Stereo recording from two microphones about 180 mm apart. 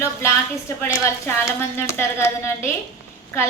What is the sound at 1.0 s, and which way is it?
A woman's voice, 15° left (ahead or behind).